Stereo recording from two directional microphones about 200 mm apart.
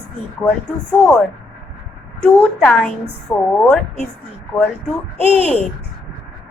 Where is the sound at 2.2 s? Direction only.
5° left (ahead or behind).